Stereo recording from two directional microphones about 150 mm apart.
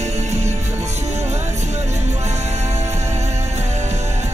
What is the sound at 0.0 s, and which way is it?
Music, 50° right (ahead or behind).